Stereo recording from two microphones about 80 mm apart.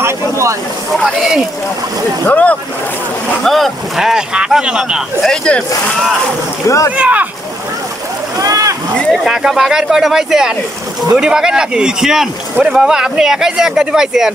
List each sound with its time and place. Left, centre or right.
0.0 s vehicle: right
2.2 s speech: centre
3.4 s speech: centre
5.2 s speech: centre
6.7 s speech: left
7.0 s speech: centre
8.4 s rowboat: right
9.1 s speech: centre